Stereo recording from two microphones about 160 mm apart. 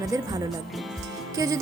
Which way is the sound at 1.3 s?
20° right (ahead or behind).